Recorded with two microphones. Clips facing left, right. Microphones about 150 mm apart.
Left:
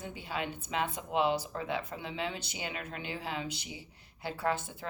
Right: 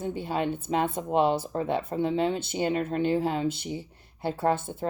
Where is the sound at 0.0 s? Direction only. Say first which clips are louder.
Right 9 dB; 50° right (ahead or behind).